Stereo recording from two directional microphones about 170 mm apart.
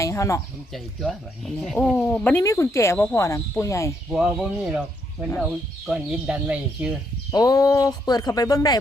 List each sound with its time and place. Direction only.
0.0 s speech: 15° left (ahead or behind)
0.7 s speech: centre (ahead or behind); by 3.9 s 15° left (ahead or behind)
4.1 s speech: 5° right (ahead or behind)
5.9 s speech: 5° right (ahead or behind)
7.3 s speech: 20° left (ahead or behind)